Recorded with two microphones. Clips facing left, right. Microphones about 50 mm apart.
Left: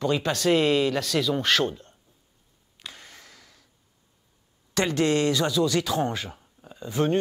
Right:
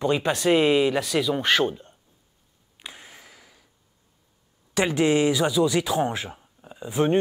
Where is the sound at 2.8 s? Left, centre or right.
Centre.